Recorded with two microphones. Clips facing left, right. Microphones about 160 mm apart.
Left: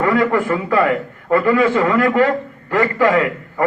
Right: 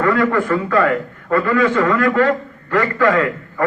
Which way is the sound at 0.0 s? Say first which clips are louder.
Even; 15° left (ahead or behind).